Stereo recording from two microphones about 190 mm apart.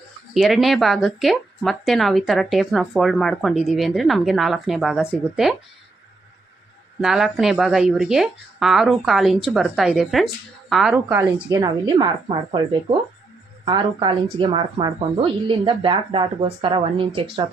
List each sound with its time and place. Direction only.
0.3 s speech: centre (ahead or behind)
7.0 s speech: centre (ahead or behind)
11.1 s a woman's voice: 15° right (ahead or behind); by 17.2 s 30° right (ahead or behind)